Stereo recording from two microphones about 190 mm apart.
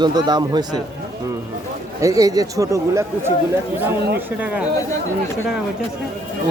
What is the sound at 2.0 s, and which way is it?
A man's voice, 20° right (ahead or behind).